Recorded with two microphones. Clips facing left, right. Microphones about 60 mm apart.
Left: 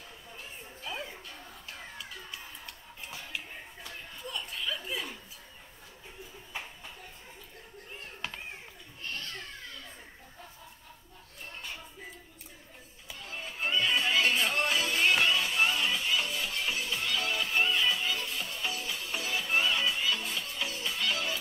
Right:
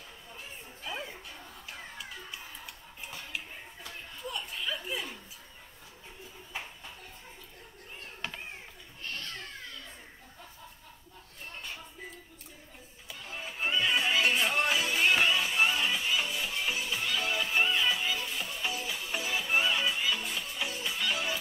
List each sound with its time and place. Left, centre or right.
0.8 s music: centre
8.2 s children playing: centre
13.1 s music: centre